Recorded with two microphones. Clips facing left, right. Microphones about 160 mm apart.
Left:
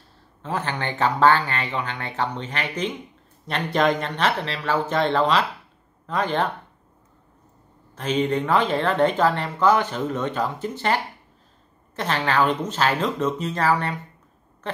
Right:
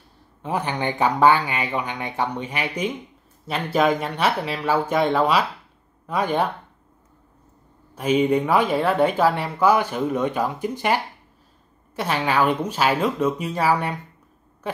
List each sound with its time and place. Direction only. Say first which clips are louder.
0.4 s speech: right 2 dB; 15° right (ahead or behind)
7.9 s speech: right 4 dB; 10° right (ahead or behind)